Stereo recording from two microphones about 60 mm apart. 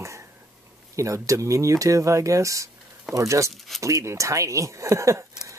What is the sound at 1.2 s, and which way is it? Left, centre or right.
Speech, right.